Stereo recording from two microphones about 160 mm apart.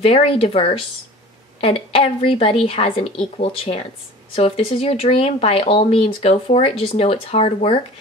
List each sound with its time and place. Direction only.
0.0 s speech: 40° left (ahead or behind)